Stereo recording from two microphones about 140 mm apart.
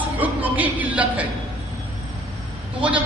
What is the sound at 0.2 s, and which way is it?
Speech, 10° right (ahead or behind).